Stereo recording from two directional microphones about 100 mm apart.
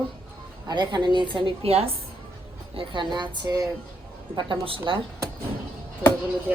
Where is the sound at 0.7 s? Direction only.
45° right (ahead or behind).